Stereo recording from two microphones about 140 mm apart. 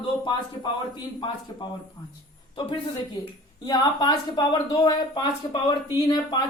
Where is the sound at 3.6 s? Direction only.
30° left (ahead or behind).